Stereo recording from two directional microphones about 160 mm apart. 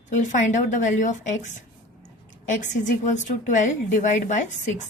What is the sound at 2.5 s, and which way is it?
A woman's voice, 50° left (ahead or behind).